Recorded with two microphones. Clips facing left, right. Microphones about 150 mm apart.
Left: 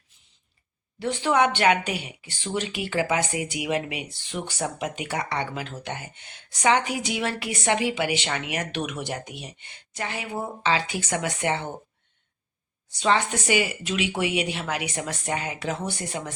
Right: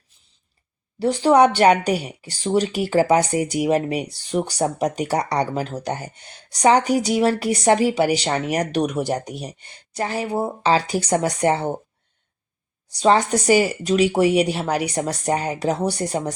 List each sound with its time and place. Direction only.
0.9 s speech: 35° right (ahead or behind)
12.9 s speech: 35° right (ahead or behind)